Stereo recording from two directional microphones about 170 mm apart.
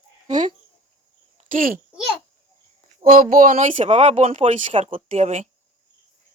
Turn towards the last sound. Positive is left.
turn(degrees=-45)  # may be behind; listen again after turning